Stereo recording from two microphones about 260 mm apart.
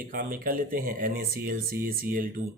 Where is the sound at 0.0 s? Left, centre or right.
Right.